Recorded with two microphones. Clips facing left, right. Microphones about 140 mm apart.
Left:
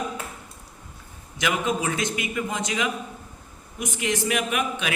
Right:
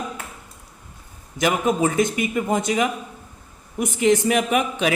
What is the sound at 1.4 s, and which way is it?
A man's voice, 40° right (ahead or behind).